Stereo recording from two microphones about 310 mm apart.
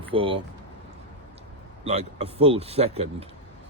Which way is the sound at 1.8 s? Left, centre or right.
Centre.